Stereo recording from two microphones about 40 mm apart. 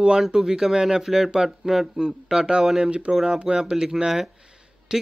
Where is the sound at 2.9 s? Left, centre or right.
Right.